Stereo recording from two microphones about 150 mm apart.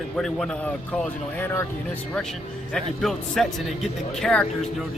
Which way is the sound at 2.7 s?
Centre (ahead or behind).